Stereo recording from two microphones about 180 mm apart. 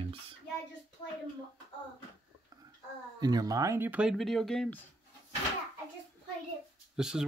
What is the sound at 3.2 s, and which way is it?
Speech, 20° right (ahead or behind).